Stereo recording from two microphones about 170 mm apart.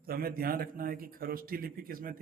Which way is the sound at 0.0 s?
60° right (ahead or behind).